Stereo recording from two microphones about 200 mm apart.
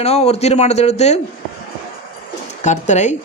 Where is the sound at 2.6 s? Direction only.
35° left (ahead or behind).